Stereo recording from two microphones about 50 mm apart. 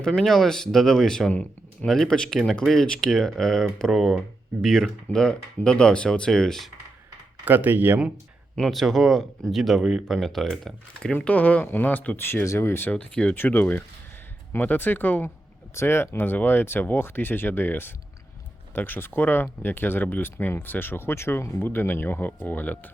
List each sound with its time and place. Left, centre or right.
0.2 s speech: centre
1.3 s speech: left
1.9 s speech: centre
5.1 s speech: centre
7.4 s speech: right
8.7 s speech: centre
11.3 s speech: left
12.1 s speech: left
12.9 s speech: left
13.3 s speech: left
15.7 s speech: left